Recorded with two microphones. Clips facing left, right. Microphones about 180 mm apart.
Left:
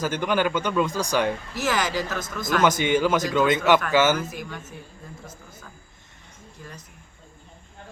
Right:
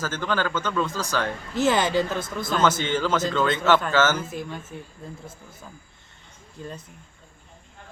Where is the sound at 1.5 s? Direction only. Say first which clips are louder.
Right 7 dB; 30° right (ahead or behind).